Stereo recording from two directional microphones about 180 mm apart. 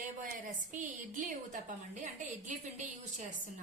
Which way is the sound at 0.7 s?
45° right (ahead or behind).